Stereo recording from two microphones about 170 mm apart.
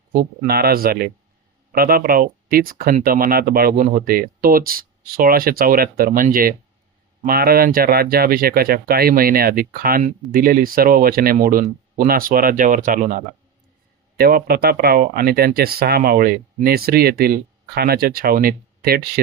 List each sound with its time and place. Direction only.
0.1 s speech: 60° right (ahead or behind)
14.2 s speech: 65° right (ahead or behind)